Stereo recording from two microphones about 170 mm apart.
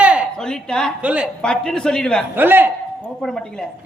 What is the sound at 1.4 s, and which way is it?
Speech, 5° left (ahead or behind).